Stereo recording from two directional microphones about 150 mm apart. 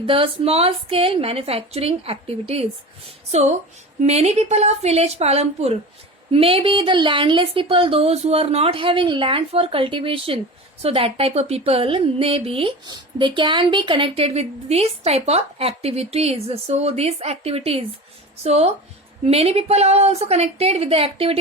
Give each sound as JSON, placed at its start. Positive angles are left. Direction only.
{"t": 0.0, "sound": "speech", "side_deg": -40}
{"t": 4.0, "sound": "a woman's voice", "side_deg": -45}